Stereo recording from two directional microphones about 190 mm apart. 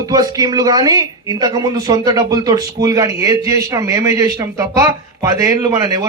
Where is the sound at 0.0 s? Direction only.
20° right (ahead or behind).